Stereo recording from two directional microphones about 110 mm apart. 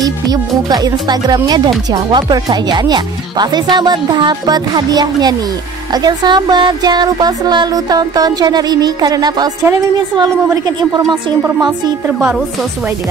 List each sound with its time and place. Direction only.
0.0 s speech: 35° right (ahead or behind)